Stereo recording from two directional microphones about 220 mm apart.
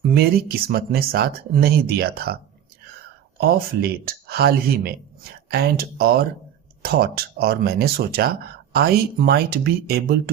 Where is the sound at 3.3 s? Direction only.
45° right (ahead or behind).